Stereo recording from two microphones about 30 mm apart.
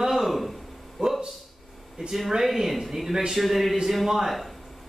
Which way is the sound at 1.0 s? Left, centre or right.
Centre.